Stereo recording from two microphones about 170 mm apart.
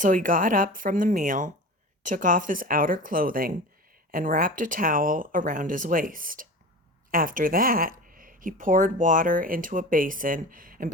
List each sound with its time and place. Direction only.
0.0 s speech: 50° right (ahead or behind)